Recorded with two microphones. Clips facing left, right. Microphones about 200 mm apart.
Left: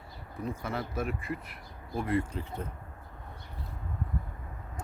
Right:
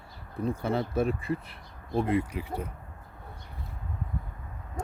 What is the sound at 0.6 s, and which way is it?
Speech, 30° right (ahead or behind).